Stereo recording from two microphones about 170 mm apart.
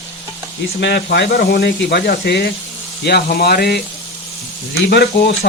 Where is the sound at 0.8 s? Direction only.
85° left; by 3.7 s 65° left (ahead or behind).